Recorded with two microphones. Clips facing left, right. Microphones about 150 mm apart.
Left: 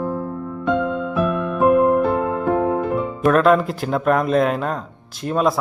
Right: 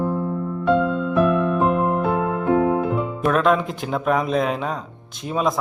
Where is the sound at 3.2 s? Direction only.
Centre (ahead or behind).